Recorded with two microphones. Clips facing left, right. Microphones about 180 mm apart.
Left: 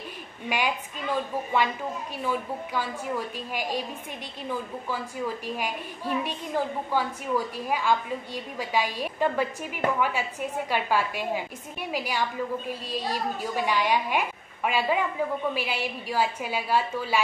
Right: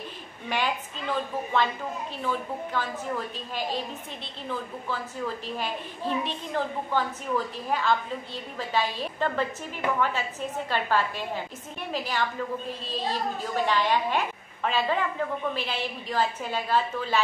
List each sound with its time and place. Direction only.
0.5 s a woman's voice: 10° left (ahead or behind)
2.2 s a woman's voice: 10° left (ahead or behind)